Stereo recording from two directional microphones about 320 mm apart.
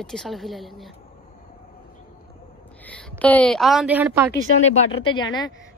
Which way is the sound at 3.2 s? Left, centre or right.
Centre.